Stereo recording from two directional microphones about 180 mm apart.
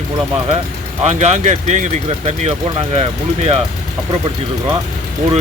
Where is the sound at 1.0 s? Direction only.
40° right (ahead or behind).